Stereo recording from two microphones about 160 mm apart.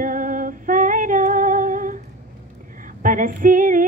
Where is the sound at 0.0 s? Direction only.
60° right (ahead or behind).